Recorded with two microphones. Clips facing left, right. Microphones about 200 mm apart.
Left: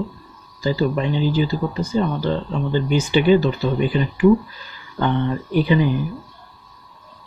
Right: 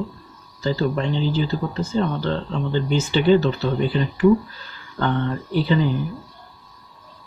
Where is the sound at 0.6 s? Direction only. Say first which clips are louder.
Left 2 dB; 10° left (ahead or behind).